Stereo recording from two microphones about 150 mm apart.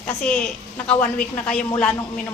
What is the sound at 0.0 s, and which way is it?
A woman's voice, 5° left (ahead or behind).